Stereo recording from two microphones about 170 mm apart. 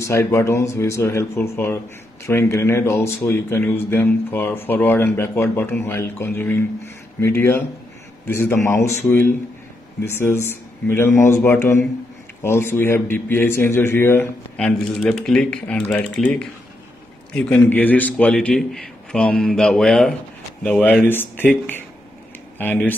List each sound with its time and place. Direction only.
0.0 s a man's voice: 15° left (ahead or behind)